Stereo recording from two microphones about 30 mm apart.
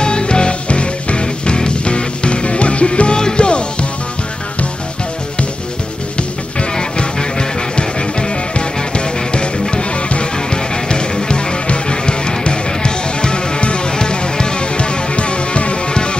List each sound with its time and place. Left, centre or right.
0.0 s music: left
6.8 s music: left